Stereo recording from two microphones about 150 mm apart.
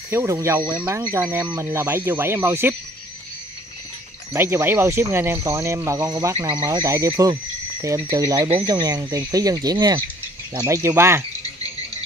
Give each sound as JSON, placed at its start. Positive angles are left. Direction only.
{"t": 0.1, "sound": "speech", "side_deg": -20}
{"t": 4.3, "sound": "speech", "side_deg": -15}